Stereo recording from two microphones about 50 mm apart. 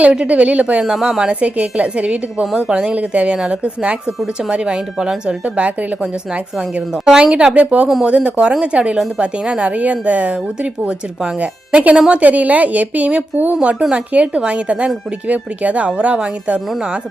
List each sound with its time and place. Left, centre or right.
0.0 s a woman's voice: right
1.1 s a woman's voice: centre
1.4 s a woman's voice: right
3.3 s a woman's voice: centre
7.5 s a woman's voice: right